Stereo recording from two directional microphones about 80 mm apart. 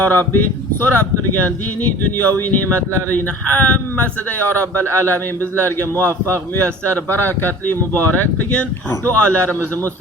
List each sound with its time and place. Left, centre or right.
0.0 s speech: left
2.1 s speech: left